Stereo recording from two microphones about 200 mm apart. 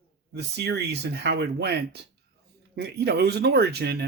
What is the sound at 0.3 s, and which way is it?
Speech, 55° right (ahead or behind).